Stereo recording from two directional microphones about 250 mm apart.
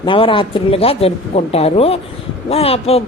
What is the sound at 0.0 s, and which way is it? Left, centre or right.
Speech, centre.